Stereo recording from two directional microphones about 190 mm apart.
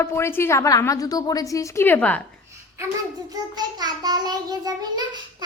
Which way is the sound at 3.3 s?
20° right (ahead or behind).